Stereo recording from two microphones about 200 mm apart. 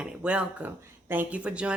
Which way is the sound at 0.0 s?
5° right (ahead or behind).